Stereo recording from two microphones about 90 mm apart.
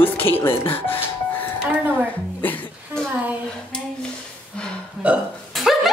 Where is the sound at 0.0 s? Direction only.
25° left (ahead or behind).